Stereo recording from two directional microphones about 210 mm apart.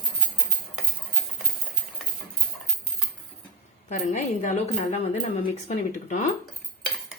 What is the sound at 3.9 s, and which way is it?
Speech, 35° left (ahead or behind).